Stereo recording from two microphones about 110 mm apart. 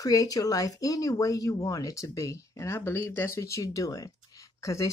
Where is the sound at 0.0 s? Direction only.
30° left (ahead or behind).